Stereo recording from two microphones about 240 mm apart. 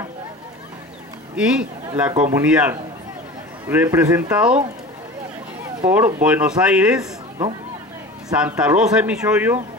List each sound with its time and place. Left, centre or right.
1.3 s a man's voice: centre
5.8 s speech: centre
8.3 s speech: centre